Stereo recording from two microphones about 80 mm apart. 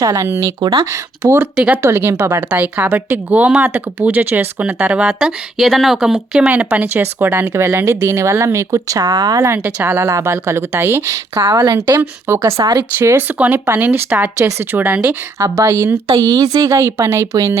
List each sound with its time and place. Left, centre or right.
0.0 s a woman's voice: right
1.4 s speech: centre
1.8 s speech: right
2.5 s speech: right
4.9 s speech: centre; by 9.4 s right
9.6 s speech: right
10.0 s speech: right
11.5 s a woman's voice: right
12.3 s speech: right; by 15.1 s centre
15.4 s a woman's voice: right
15.7 s speech: right
16.2 s speech: right